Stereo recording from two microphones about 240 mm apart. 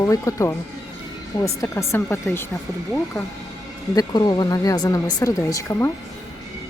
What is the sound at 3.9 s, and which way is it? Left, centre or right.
Speech, centre.